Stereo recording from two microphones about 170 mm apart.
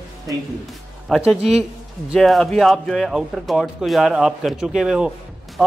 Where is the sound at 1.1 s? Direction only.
Centre (ahead or behind).